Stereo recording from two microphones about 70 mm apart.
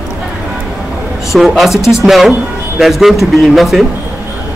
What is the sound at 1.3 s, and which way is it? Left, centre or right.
Speech, centre.